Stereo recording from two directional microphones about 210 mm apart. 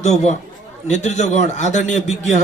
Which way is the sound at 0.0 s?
35° left (ahead or behind).